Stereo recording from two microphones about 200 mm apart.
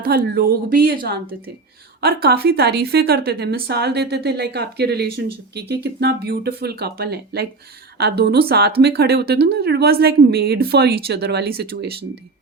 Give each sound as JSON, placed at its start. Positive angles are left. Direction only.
{"t": 0.0, "sound": "a woman's voice", "side_deg": -50}
{"t": 2.2, "sound": "a woman's voice", "side_deg": -50}